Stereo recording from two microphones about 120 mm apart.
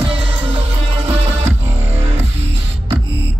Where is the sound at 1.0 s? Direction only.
70° right (ahead or behind).